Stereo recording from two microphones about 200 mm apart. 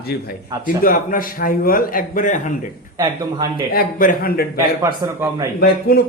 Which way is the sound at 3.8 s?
45° left (ahead or behind).